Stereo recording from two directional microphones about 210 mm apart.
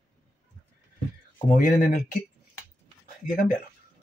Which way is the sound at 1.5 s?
40° left (ahead or behind).